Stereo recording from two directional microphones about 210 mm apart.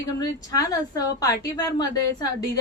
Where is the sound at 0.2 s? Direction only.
15° left (ahead or behind).